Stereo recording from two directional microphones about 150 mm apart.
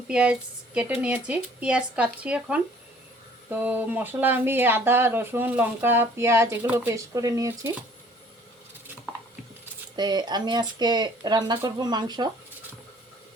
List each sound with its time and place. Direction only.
0.1 s speech: 5° right (ahead or behind)
9.9 s speech: 30° right (ahead or behind)